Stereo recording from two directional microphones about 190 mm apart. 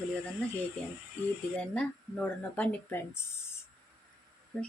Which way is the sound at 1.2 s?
10° left (ahead or behind).